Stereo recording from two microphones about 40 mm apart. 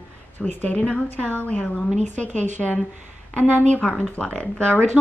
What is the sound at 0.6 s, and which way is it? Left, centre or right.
A woman's voice, left.